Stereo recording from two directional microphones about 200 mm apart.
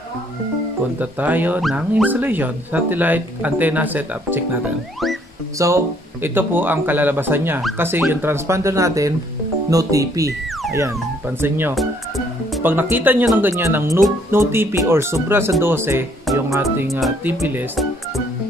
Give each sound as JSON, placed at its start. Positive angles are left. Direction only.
{"t": 0.9, "sound": "speech", "side_deg": -10}
{"t": 5.6, "sound": "speech", "side_deg": -15}